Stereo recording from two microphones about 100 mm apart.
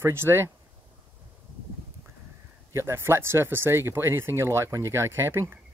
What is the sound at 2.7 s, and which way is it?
Speech, 25° right (ahead or behind).